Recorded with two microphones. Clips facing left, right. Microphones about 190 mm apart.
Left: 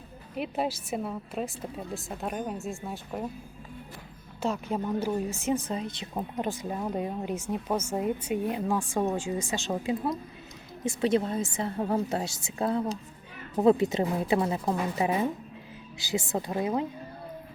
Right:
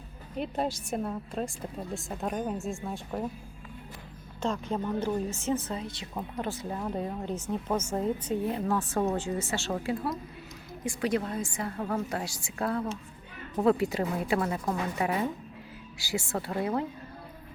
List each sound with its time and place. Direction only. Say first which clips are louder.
0.3 s speech: left 1 dB; 5° left (ahead or behind)
4.4 s a woman's voice: left 1 dB; 10° left (ahead or behind)